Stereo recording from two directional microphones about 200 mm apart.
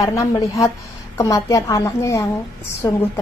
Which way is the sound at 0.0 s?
15° left (ahead or behind).